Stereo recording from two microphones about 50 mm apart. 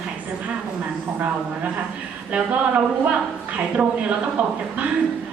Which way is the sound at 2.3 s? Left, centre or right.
Right.